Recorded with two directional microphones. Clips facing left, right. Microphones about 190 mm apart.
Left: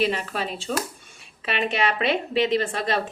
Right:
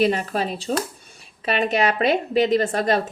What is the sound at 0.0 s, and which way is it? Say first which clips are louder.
A woman's voice: right 4 dB; 45° right (ahead or behind).